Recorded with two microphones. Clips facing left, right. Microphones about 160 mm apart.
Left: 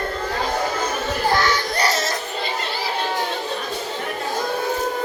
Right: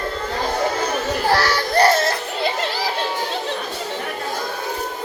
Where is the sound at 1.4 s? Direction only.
55° right (ahead or behind).